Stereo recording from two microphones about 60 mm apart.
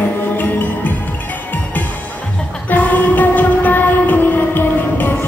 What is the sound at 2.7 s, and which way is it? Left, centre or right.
Train, left.